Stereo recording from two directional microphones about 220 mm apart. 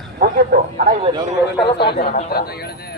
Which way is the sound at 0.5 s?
45° right (ahead or behind).